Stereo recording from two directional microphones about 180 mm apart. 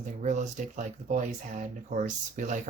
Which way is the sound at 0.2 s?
40° right (ahead or behind).